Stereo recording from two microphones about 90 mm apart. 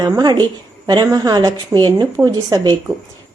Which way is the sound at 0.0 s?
50° right (ahead or behind).